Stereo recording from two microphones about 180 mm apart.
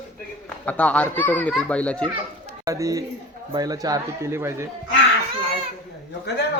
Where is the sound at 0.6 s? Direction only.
10° left (ahead or behind).